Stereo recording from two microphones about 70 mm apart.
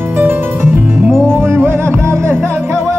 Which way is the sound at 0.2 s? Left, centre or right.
Right.